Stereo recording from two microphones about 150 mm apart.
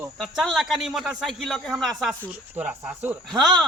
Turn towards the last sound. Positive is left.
turn(degrees=0)  # may be behind; listen again after turning